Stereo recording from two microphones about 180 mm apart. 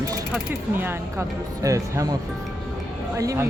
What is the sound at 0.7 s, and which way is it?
Speech, 15° right (ahead or behind).